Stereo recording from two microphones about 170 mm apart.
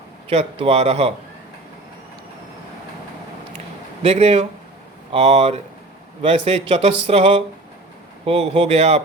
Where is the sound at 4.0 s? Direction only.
35° right (ahead or behind).